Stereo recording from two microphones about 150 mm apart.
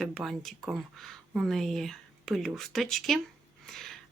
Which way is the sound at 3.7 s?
5° left (ahead or behind).